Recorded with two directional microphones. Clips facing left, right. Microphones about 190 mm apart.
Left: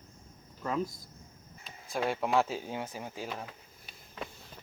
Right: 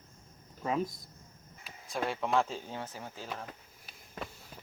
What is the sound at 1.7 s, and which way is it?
Speech, centre (ahead or behind).